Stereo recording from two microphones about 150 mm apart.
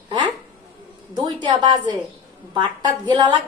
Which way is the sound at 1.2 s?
30° right (ahead or behind).